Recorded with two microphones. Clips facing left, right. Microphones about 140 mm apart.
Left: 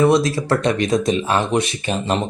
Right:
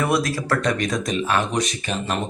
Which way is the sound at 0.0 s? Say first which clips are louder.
Left 6 dB; 25° left (ahead or behind).